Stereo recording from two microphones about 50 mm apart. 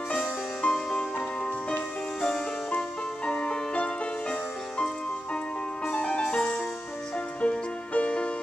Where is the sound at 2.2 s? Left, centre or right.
Centre.